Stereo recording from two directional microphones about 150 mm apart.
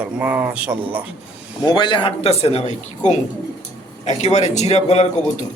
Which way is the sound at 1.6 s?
30° left (ahead or behind).